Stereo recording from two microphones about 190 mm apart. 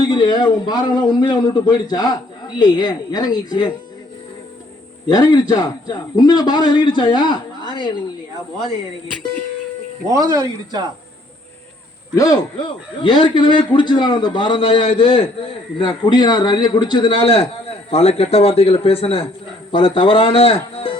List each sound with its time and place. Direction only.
0.0 s a man's voice: 20° left (ahead or behind)
5.0 s a man's voice: 20° left (ahead or behind)
10.1 s speech: 20° right (ahead or behind)
12.1 s a man's voice: 20° left (ahead or behind)